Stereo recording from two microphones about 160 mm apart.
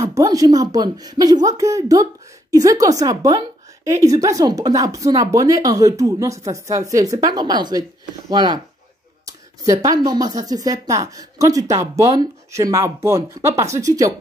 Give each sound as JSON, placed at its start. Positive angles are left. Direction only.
{"t": 0.0, "sound": "a woman's voice", "side_deg": -20}